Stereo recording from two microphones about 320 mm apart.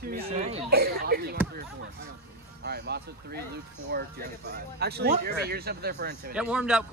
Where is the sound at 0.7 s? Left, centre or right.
Right.